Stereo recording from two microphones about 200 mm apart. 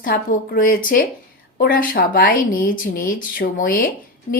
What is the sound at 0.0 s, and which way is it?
A woman's voice, 45° left (ahead or behind).